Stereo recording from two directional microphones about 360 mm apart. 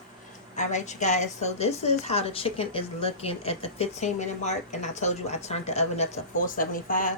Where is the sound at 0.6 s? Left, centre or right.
Centre.